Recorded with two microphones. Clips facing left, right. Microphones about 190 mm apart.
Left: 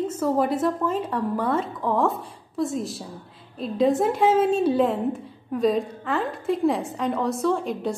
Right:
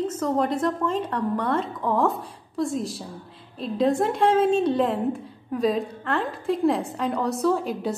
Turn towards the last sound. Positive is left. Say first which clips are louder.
# right 1 dB
turn(degrees=0)  # may be behind; listen again after turning